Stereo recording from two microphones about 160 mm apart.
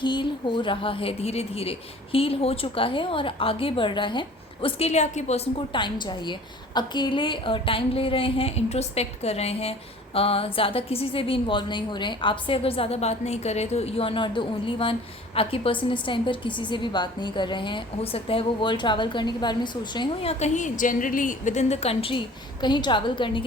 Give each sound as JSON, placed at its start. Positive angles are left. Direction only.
{"t": 0.0, "sound": "a woman's voice", "side_deg": 30}